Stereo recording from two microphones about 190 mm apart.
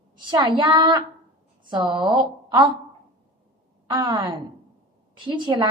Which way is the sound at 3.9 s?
25° right (ahead or behind).